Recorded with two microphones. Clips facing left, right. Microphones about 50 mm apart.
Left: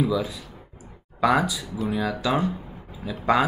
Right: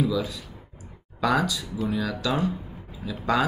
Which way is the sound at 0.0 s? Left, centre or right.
Centre.